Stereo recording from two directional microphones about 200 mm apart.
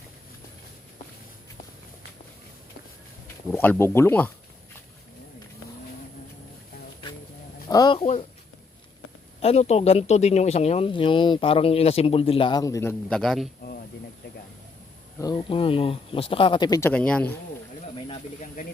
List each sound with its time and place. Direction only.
3.5 s speech: 10° left (ahead or behind)
7.7 s speech: 20° left (ahead or behind)
9.4 s speech: 30° left (ahead or behind); by 13.5 s centre (ahead or behind)
15.2 s speech: 25° left (ahead or behind); by 17.3 s 5° left (ahead or behind)
17.8 s a sound: 30° left (ahead or behind)